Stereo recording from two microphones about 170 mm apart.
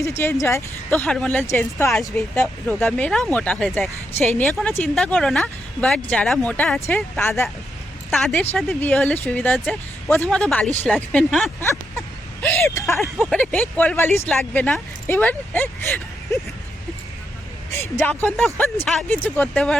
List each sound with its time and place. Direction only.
0.0 s speech: 15° left (ahead or behind)
1.9 s speech: centre (ahead or behind)
2.3 s speech: 15° left (ahead or behind)
8.1 s speech: 5° left (ahead or behind)
11.6 s a sound: 15° left (ahead or behind)
12.6 s speech: 15° left (ahead or behind)
13.0 s speech: centre (ahead or behind)
17.7 s speech: 15° left (ahead or behind)